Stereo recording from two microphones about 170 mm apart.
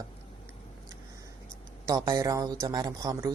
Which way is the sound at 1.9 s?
20° right (ahead or behind).